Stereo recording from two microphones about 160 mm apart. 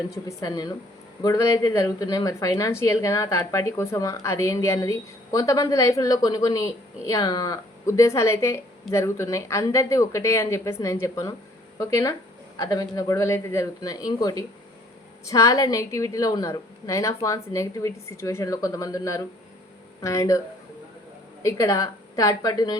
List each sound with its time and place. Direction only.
0.3 s a woman's voice: 25° left (ahead or behind)
21.4 s a woman's voice: 20° left (ahead or behind)